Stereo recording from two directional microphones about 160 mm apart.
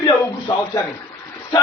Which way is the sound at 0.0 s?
25° left (ahead or behind).